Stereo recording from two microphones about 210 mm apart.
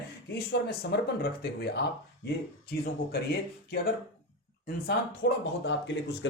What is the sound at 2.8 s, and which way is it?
Speech, 50° left (ahead or behind).